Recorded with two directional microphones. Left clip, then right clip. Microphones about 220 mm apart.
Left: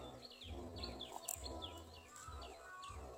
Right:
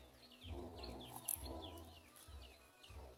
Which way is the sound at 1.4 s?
45° left (ahead or behind).